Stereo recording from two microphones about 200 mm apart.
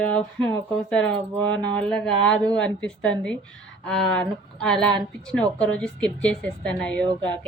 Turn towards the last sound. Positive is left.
turn(degrees=5)  # may be behind; listen again after turning